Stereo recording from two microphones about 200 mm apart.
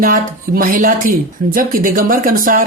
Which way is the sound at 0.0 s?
45° right (ahead or behind).